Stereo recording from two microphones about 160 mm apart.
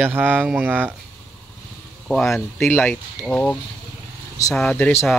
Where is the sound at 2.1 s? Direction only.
Centre (ahead or behind).